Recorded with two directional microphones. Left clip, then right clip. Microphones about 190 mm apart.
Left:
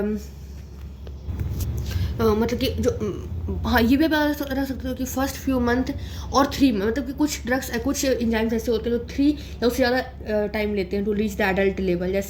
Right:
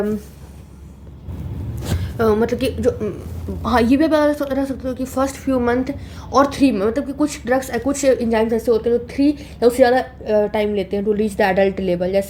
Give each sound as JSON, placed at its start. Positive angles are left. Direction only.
{"t": 2.0, "sound": "a woman's voice", "side_deg": -20}